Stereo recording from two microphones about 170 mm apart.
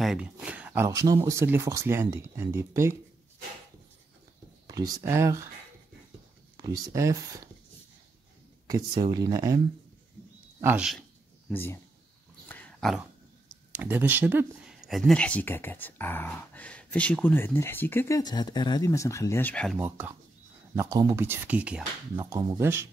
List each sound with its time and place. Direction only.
0.0 s a sound: 5° right (ahead or behind)
0.8 s speech: 20° right (ahead or behind)
4.6 s speech: 20° right (ahead or behind)
6.5 s speech: 20° right (ahead or behind)
8.6 s speech: 20° right (ahead or behind)
10.6 s speech: 10° right (ahead or behind)
10.9 s a sound: centre (ahead or behind)
11.5 s speech: 15° left (ahead or behind)
12.4 s dog: 10° left (ahead or behind)
13.5 s speech: 10° right (ahead or behind); by 19.8 s 5° left (ahead or behind)
19.8 s speech: 10° right (ahead or behind)
22.1 s speech: 25° right (ahead or behind)